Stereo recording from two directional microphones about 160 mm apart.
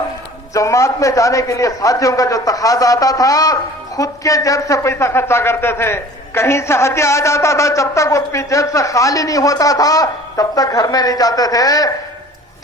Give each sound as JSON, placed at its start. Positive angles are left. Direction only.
{"t": 0.5, "sound": "a man's voice", "side_deg": 20}